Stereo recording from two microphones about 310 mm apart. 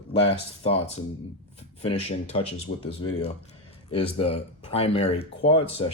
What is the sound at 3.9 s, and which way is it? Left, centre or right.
Speech, centre.